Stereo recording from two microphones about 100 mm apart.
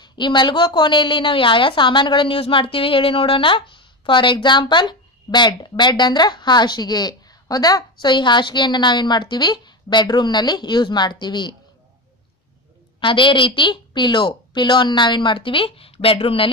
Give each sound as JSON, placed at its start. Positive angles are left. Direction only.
{"t": 0.0, "sound": "a woman's voice", "side_deg": 50}
{"t": 13.0, "sound": "a woman's voice", "side_deg": 55}